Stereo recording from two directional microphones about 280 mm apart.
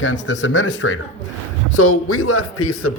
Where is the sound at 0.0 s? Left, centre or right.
Left.